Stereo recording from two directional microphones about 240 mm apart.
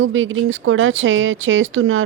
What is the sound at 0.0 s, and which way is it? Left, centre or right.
Speech, right.